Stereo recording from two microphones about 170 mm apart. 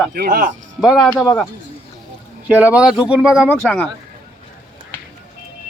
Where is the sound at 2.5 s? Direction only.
10° right (ahead or behind).